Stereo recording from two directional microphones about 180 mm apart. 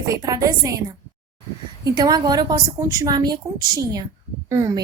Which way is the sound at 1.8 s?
20° right (ahead or behind).